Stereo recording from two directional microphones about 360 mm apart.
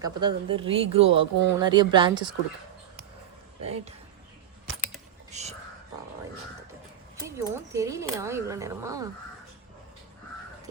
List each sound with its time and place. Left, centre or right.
0.0 s speech: centre
3.6 s speech: centre
5.3 s whispering: centre
7.3 s speech: centre